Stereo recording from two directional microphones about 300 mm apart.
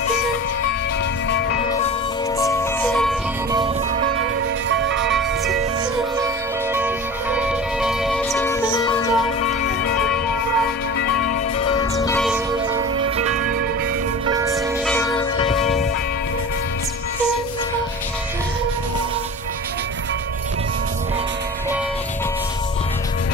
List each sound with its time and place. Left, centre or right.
2.3 s music: centre
4.6 s music: right
6.1 s music: centre
11.7 s music: centre
12.9 s music: right
14.2 s music: centre
14.5 s music: centre